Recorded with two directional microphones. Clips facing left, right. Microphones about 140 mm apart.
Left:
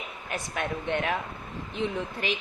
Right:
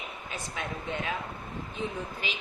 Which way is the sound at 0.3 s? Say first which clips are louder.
Left 6 dB; 65° left (ahead or behind).